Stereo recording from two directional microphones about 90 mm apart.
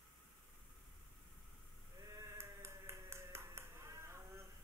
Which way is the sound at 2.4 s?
30° right (ahead or behind).